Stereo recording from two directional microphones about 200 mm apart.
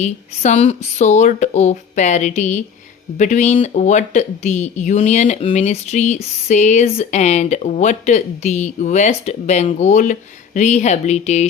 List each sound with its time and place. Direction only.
0.0 s speech: 35° left (ahead or behind)